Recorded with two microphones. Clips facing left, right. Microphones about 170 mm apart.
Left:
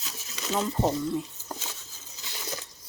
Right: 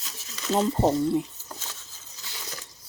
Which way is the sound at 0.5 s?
25° right (ahead or behind).